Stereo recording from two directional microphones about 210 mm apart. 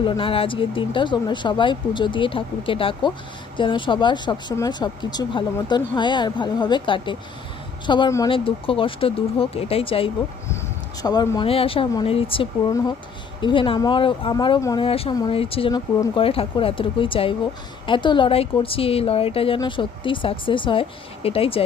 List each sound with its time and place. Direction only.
0.0 s speech: 25° left (ahead or behind)